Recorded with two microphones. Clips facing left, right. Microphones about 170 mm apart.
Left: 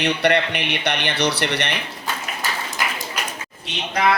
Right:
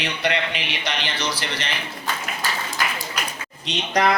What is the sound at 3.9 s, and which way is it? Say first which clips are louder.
Speech: even; 40° right (ahead or behind).